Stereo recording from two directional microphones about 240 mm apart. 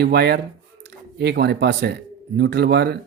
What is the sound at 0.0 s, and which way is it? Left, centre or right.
Speech, right.